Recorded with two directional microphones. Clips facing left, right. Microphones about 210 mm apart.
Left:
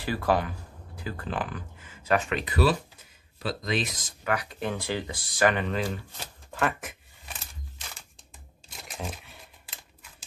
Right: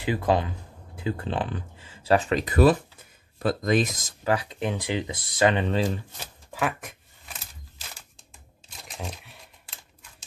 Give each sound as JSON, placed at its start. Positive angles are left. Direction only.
{"t": 0.0, "sound": "speech", "side_deg": -20}
{"t": 4.2, "sound": "speech", "side_deg": -30}
{"t": 6.5, "sound": "speech", "side_deg": 0}
{"t": 8.9, "sound": "a sound", "side_deg": 0}